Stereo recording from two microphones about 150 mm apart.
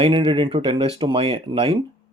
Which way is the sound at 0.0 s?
35° right (ahead or behind).